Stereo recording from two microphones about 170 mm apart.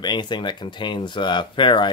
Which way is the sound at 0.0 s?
25° left (ahead or behind).